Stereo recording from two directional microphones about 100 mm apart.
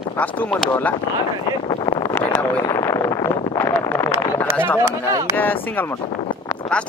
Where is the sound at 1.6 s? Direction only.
50° left (ahead or behind).